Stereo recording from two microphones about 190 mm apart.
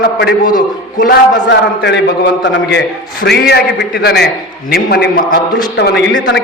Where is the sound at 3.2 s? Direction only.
55° left (ahead or behind).